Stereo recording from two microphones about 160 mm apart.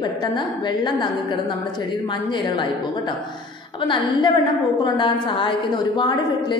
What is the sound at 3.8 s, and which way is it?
A woman's voice, 30° left (ahead or behind).